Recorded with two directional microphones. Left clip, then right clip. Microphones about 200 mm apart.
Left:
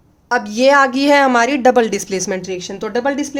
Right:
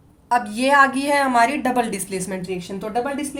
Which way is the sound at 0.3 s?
35° left (ahead or behind).